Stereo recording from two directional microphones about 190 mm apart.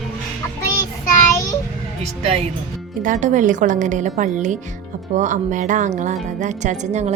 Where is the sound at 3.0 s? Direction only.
40° right (ahead or behind).